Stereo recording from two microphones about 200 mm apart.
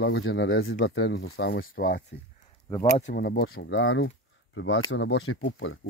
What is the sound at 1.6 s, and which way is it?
Speech, 45° left (ahead or behind).